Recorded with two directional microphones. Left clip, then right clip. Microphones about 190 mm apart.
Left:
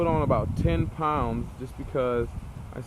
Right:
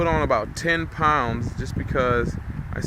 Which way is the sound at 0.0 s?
5° right (ahead or behind).